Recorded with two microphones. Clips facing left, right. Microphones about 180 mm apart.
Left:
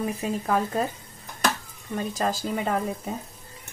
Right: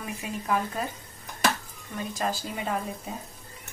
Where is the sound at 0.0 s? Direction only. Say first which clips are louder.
Left 7 dB; 35° left (ahead or behind).